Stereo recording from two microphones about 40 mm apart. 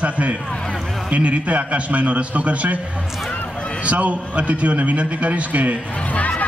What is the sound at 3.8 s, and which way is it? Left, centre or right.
A man's voice, right.